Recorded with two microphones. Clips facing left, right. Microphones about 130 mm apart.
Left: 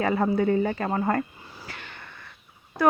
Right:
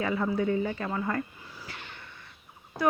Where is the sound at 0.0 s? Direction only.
55° left (ahead or behind).